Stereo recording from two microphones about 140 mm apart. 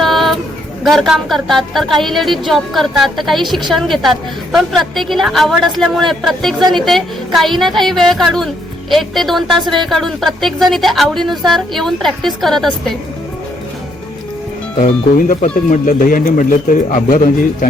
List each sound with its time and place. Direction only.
0.0 s a sound: centre (ahead or behind)
0.9 s a woman's voice: centre (ahead or behind)
15.7 s a man's voice: 75° left (ahead or behind)